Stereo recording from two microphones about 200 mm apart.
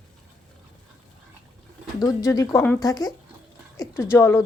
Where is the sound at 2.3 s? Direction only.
15° left (ahead or behind).